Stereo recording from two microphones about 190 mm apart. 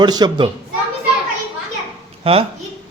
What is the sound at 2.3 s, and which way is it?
Speech, 30° right (ahead or behind).